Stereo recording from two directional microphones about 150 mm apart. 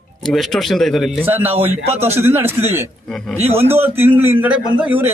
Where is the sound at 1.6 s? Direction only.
40° right (ahead or behind).